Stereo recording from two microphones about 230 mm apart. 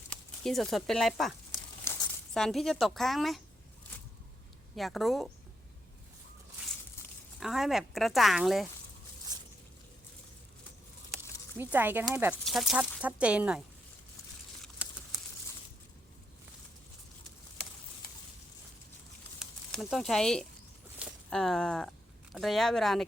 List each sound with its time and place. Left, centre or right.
0.4 s speech: centre
1.8 s speech: centre
4.7 s speech: centre
7.3 s speech: centre
9.3 s a sound: centre
11.1 s a sound: centre
12.3 s speech: centre
19.7 s speech: centre